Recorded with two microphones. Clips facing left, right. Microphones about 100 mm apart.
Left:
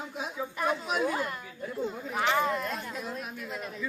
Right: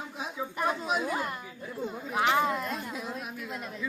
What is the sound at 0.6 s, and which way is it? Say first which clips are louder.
Speech: even; 25° right (ahead or behind).